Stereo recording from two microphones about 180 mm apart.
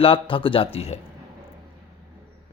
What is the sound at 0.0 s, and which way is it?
Speech, 30° left (ahead or behind).